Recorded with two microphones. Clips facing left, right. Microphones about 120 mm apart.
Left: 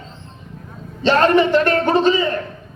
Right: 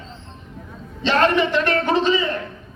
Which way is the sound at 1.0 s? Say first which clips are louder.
Left 4 dB; 40° left (ahead or behind).